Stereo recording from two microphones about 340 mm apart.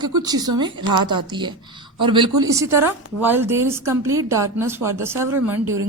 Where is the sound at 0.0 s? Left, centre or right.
Centre.